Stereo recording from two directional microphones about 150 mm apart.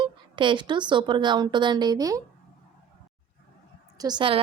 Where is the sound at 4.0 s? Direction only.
30° right (ahead or behind).